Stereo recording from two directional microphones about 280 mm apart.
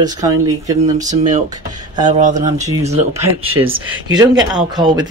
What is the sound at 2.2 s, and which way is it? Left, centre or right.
Speech, right.